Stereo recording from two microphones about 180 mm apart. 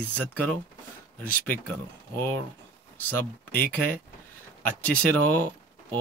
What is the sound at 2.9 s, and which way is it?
Speech, 10° left (ahead or behind).